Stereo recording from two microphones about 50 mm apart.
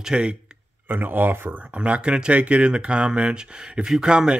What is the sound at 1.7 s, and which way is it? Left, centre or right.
Speech, right.